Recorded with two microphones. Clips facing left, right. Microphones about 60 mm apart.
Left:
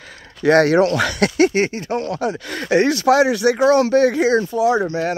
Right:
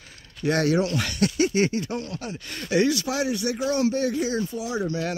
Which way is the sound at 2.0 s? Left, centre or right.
Left.